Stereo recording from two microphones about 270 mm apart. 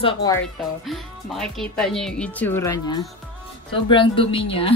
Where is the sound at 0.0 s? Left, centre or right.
Centre.